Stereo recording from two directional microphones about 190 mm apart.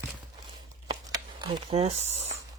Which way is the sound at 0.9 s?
25° right (ahead or behind).